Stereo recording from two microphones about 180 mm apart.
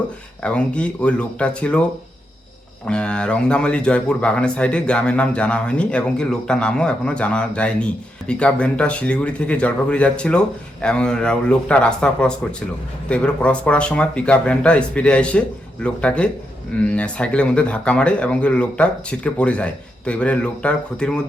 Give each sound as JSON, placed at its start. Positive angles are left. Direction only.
{"t": 0.4, "sound": "speech", "side_deg": 5}
{"t": 2.8, "sound": "speech", "side_deg": 5}